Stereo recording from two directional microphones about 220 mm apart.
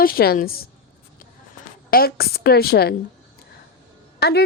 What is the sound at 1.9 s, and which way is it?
A woman's voice, 45° left (ahead or behind).